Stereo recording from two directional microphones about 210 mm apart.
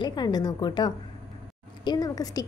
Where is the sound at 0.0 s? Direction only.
20° left (ahead or behind).